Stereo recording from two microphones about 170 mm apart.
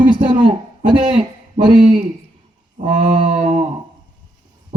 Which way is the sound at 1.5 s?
45° right (ahead or behind).